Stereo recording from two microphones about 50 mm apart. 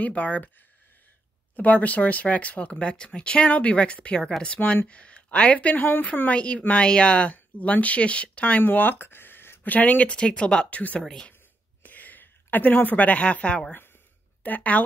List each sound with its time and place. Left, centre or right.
0.0 s speech: left
1.5 s speech: left
9.7 s speech: left
10.7 s speech: left
11.0 s speech: centre
11.8 s a sound: left
13.2 s speech: left
14.4 s a woman's voice: left